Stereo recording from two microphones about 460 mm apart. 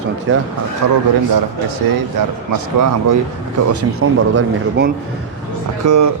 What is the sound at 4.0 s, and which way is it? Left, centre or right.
Speech, right.